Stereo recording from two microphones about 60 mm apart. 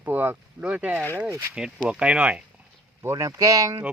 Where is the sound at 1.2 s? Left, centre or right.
Right.